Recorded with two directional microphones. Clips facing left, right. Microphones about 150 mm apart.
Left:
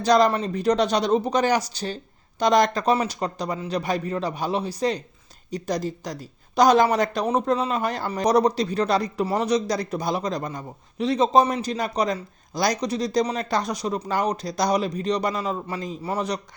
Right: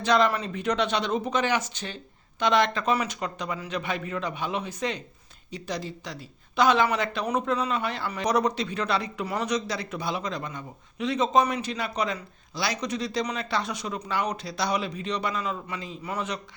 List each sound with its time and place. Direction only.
0.0 s a man's voice: 40° left (ahead or behind)